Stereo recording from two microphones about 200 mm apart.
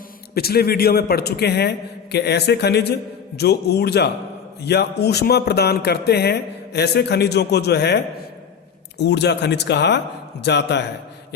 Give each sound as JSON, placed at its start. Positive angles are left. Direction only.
{"t": 0.3, "sound": "a man's voice", "side_deg": 50}
{"t": 9.0, "sound": "speech", "side_deg": 55}